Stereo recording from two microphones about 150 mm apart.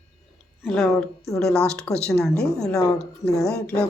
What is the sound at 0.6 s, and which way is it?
A woman's voice, 5° left (ahead or behind).